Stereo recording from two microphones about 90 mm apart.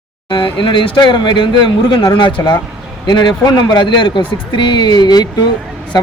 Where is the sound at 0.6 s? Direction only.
70° left (ahead or behind).